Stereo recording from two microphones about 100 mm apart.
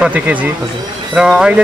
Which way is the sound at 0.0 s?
15° right (ahead or behind).